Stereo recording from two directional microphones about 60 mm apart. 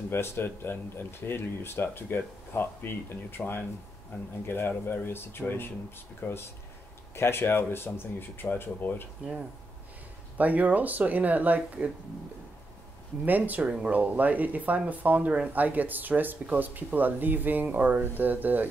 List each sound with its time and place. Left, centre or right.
0.1 s speech: left
10.3 s speech: right
13.5 s speech: right